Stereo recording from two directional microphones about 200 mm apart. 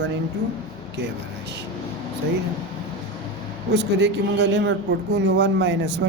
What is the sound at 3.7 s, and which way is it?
Speech, 60° right (ahead or behind).